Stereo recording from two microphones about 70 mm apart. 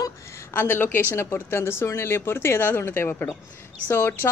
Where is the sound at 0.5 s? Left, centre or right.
Left.